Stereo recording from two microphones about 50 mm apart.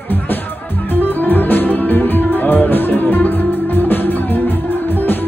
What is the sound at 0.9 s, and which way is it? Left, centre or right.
Music, left.